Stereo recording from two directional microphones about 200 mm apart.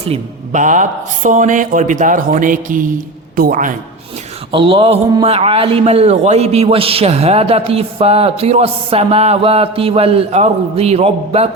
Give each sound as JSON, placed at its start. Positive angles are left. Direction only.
{"t": 0.0, "sound": "speech", "side_deg": -35}
{"t": 4.5, "sound": "a man's voice", "side_deg": -25}